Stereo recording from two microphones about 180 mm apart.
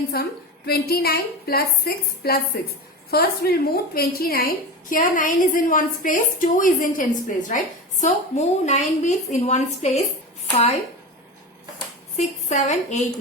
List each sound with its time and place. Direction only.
0.1 s a woman's voice: 60° left (ahead or behind); by 10.0 s 40° left (ahead or behind)
12.1 s a woman's voice: 40° left (ahead or behind)